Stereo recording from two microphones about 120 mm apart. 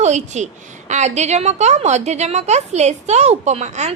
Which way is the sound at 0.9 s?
70° right (ahead or behind).